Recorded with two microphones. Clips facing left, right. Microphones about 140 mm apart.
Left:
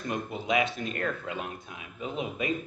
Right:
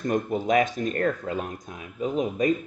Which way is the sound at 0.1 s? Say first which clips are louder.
Right 6 dB; 45° right (ahead or behind).